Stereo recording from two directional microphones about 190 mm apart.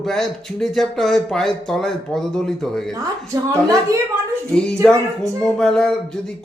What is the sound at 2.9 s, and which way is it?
A woman's voice, 15° right (ahead or behind).